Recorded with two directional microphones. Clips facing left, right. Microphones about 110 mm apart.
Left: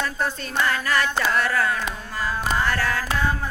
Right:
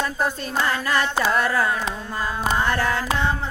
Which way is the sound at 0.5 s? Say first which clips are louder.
Left 1 dB; 30° right (ahead or behind).